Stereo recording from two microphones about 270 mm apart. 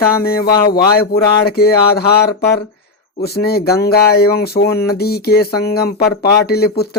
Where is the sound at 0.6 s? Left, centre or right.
Left.